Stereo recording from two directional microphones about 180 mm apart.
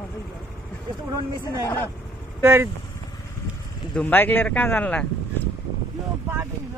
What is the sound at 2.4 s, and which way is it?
Speech, 15° right (ahead or behind).